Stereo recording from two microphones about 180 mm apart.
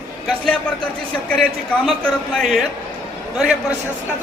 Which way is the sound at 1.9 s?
5° left (ahead or behind).